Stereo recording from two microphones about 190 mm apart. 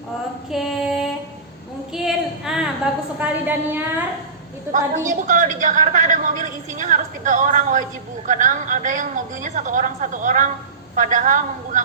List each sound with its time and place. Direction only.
0.5 s female singing: centre (ahead or behind)
1.9 s a sound: centre (ahead or behind)
3.2 s a woman's voice: 10° right (ahead or behind)
4.7 s a woman's voice: 45° right (ahead or behind)